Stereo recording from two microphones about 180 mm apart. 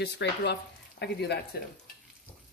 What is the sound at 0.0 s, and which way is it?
Speech, 70° left (ahead or behind).